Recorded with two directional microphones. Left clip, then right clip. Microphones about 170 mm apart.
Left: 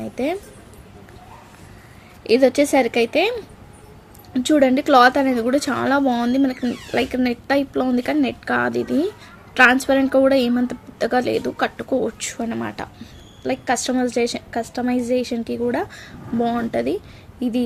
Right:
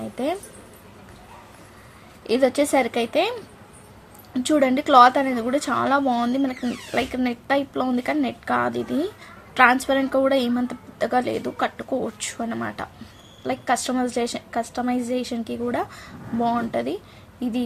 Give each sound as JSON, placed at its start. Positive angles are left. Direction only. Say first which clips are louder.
{"t": 2.2, "sound": "a woman's voice", "louder": "left 4 dB", "side_deg": 25}